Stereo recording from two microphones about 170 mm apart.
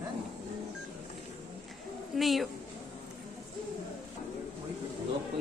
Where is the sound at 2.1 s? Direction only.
Centre (ahead or behind).